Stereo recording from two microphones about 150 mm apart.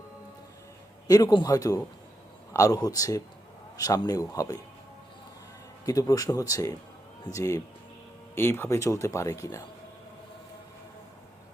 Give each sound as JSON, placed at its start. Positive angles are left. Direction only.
{"t": 1.0, "sound": "speech", "side_deg": 25}
{"t": 5.8, "sound": "speech", "side_deg": 25}